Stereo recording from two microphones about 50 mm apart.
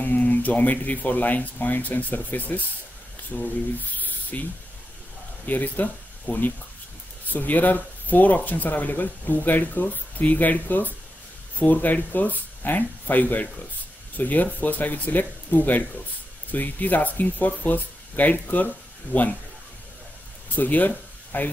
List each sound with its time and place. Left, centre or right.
0.0 s speech: left
3.3 s speech: centre
3.9 s snake: left
5.5 s speech: left
20.5 s speech: left